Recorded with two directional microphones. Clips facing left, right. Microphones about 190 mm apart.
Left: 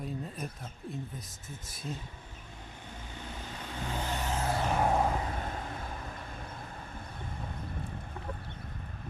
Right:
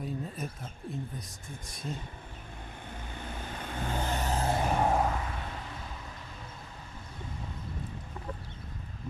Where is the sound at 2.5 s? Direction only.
55° right (ahead or behind); by 4.5 s 35° right (ahead or behind).